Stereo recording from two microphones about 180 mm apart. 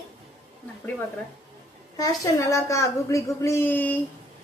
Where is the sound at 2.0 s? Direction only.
20° left (ahead or behind).